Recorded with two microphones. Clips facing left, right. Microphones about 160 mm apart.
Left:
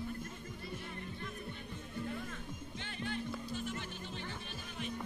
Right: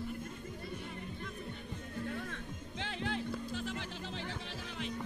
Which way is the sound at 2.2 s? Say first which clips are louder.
Right 1 dB; 80° right.